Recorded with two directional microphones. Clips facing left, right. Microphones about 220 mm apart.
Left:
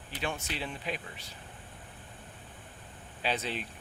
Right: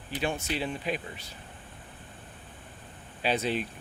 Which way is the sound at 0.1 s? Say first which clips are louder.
Right 5 dB; 5° right (ahead or behind).